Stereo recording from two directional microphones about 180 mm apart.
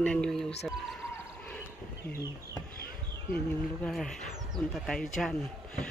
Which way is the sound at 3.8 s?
Centre (ahead or behind).